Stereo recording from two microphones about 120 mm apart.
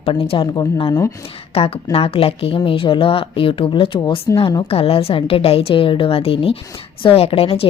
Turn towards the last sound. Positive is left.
turn(degrees=50)  # may be behind; listen again after turning